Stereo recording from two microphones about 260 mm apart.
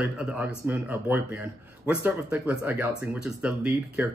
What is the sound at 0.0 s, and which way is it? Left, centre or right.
Speech, centre.